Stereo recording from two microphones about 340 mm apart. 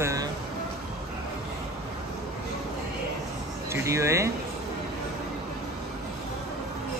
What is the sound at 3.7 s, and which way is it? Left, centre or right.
Speech, centre.